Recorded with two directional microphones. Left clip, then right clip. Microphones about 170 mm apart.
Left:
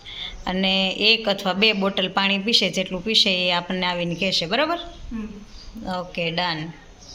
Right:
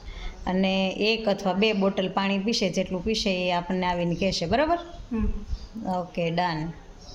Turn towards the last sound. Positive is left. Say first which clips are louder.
# left 2 dB
turn(degrees=-20)  # may be behind; listen again after turning